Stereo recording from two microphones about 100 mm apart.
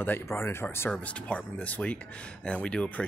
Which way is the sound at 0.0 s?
20° left (ahead or behind).